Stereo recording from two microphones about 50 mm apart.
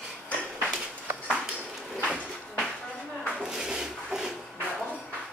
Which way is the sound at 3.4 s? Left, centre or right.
Centre.